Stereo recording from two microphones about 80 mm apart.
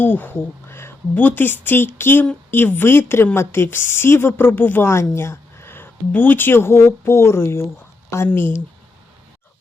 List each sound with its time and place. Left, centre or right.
0.0 s a woman's voice: left